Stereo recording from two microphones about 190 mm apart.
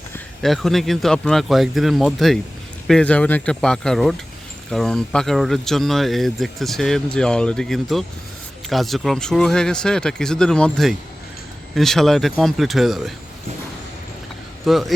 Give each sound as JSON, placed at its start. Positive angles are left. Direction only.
{"t": 0.4, "sound": "speech", "side_deg": 0}
{"t": 14.6, "sound": "a man's voice", "side_deg": 0}